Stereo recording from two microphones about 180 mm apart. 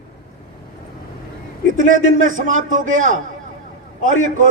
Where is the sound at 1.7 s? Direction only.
45° right (ahead or behind).